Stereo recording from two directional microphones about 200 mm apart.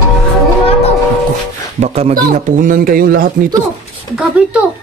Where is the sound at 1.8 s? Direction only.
30° right (ahead or behind).